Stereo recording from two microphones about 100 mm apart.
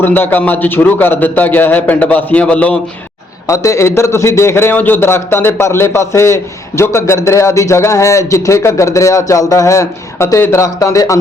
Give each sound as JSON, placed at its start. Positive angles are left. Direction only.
{"t": 0.0, "sound": "a man's voice", "side_deg": 20}
{"t": 3.4, "sound": "a man's voice", "side_deg": 30}